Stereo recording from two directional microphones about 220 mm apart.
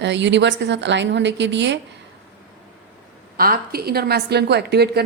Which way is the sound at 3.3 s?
40° right (ahead or behind).